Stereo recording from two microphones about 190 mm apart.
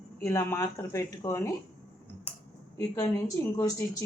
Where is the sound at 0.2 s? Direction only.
15° left (ahead or behind).